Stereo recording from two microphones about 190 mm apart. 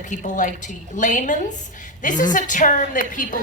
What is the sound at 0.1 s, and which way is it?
A woman's voice, 40° left (ahead or behind).